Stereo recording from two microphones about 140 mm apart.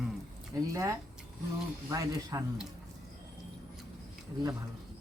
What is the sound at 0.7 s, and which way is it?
Speech, 25° right (ahead or behind).